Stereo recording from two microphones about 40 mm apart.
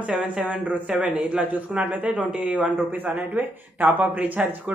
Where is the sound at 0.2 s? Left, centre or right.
Right.